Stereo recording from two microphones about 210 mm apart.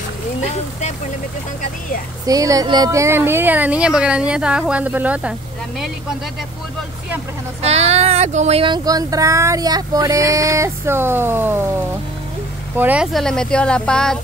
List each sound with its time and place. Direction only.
0.4 s speech: 30° left (ahead or behind)
2.2 s speech: 15° right (ahead or behind)
7.6 s speech: 30° right (ahead or behind); by 14.1 s 5° left (ahead or behind)